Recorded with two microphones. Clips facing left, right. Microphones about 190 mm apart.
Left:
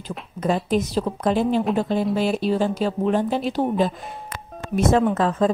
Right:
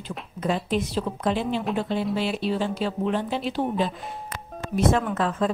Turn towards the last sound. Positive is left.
turn(degrees=40)  # may be behind; listen again after turning